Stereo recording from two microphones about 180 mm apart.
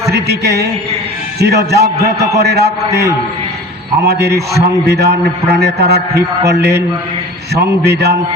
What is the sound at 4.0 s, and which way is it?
A man's voice, 65° right (ahead or behind).